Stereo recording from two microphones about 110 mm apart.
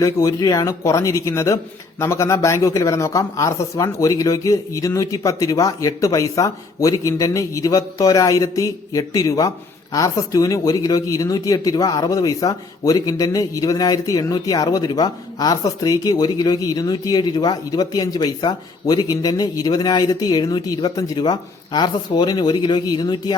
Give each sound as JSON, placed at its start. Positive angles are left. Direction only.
{"t": 0.0, "sound": "speech", "side_deg": 30}